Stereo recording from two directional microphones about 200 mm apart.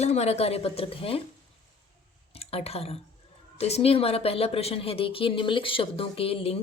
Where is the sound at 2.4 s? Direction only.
30° left (ahead or behind).